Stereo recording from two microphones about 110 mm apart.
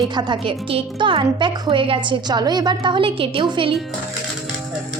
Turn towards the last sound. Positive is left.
turn(degrees=-50)  # may be behind; listen again after turning